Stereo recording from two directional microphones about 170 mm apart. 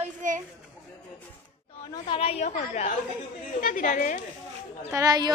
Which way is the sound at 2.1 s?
35° left (ahead or behind).